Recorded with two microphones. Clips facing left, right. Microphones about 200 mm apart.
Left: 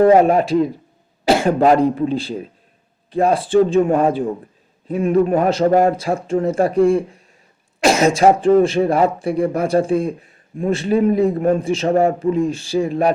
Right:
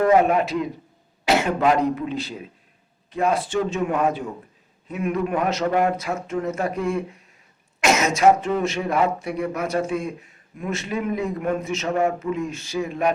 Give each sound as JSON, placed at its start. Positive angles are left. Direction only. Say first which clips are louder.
{"t": 0.0, "sound": "a man's voice", "louder": "left 6 dB", "side_deg": 30}